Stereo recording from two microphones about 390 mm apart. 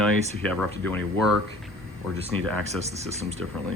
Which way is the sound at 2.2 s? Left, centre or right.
Centre.